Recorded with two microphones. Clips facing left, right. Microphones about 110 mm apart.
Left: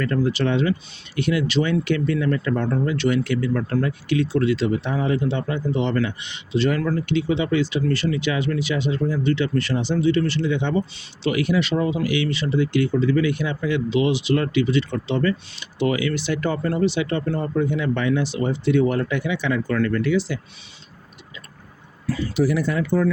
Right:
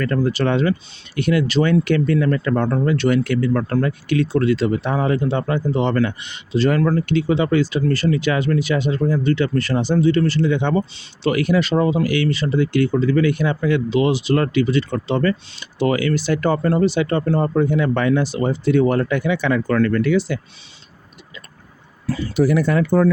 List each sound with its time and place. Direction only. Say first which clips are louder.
0.0 s speech: right 2 dB; 50° right (ahead or behind)
22.4 s speech: right 5 dB; 50° right (ahead or behind)